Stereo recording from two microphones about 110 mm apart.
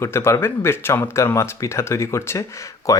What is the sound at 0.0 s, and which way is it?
Speech, 25° left (ahead or behind).